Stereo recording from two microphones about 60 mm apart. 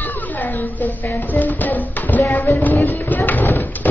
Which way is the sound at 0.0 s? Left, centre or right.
Left.